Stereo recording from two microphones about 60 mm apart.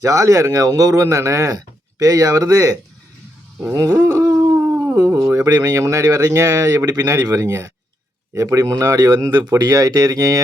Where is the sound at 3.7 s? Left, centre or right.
Right.